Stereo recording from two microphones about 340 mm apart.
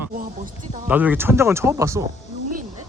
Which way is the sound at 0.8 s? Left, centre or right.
Centre.